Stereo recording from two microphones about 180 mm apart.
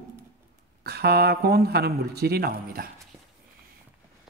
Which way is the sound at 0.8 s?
65° right (ahead or behind).